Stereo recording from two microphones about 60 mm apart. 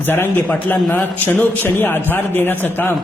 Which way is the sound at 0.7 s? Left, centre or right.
Left.